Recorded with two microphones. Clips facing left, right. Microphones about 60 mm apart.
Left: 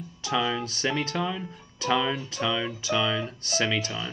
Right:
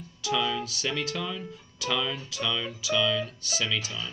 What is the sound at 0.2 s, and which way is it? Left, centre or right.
Speech, left.